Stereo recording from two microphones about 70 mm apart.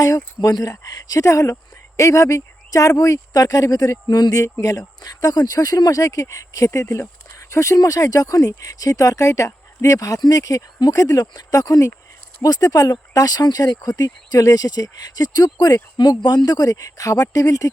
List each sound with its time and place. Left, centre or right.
0.3 s speech: left